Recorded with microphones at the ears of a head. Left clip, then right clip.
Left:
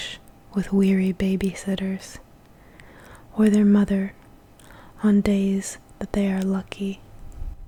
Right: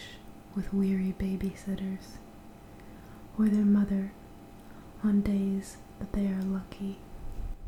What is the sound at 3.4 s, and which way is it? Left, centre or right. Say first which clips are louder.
Speech: left 9 dB; left.